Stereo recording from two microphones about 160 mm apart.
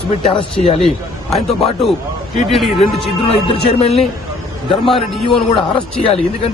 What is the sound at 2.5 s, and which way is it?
Speech, centre (ahead or behind).